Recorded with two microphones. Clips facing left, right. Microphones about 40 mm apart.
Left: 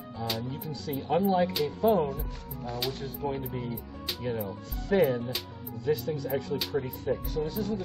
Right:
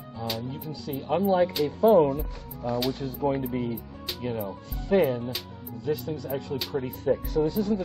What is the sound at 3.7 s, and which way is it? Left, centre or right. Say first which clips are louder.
Music: right 1 dB; centre.